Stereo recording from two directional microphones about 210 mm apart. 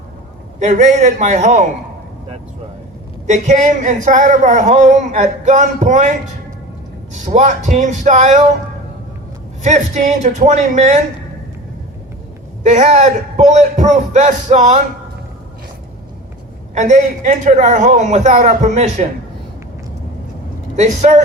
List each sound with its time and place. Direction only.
0.6 s speech: 35° right (ahead or behind)
3.2 s speech: 35° right (ahead or behind)
9.6 s speech: 35° right (ahead or behind)
12.6 s speech: 35° right (ahead or behind)
16.7 s speech: 35° right (ahead or behind)
20.7 s speech: 35° right (ahead or behind)